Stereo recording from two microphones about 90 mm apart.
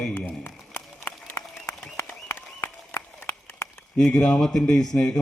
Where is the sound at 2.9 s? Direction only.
20° left (ahead or behind).